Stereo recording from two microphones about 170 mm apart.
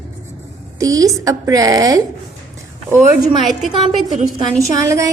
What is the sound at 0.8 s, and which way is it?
A woman's voice, 20° right (ahead or behind).